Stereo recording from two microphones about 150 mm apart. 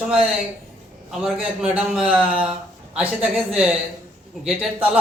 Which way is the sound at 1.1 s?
5° right (ahead or behind).